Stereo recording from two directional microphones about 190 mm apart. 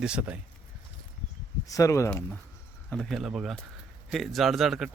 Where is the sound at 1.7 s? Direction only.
15° left (ahead or behind).